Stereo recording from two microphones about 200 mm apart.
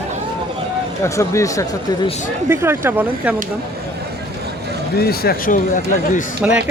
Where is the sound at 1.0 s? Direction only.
15° left (ahead or behind).